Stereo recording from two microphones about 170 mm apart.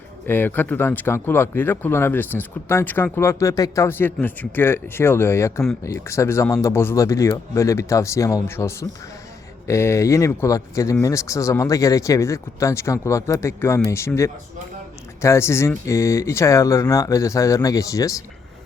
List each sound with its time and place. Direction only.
0.3 s speech: 10° left (ahead or behind)
15.2 s speech: 15° left (ahead or behind)